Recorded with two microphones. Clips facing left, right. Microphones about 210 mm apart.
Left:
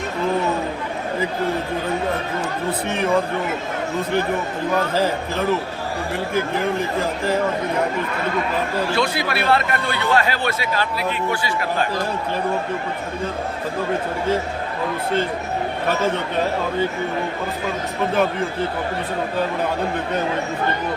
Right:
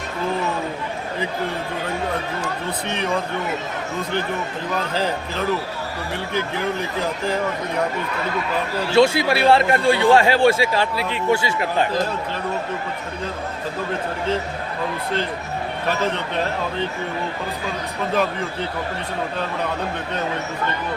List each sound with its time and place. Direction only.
8.9 s speech: 25° right (ahead or behind)